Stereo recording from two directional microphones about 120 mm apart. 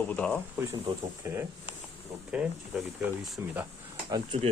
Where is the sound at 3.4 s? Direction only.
20° right (ahead or behind).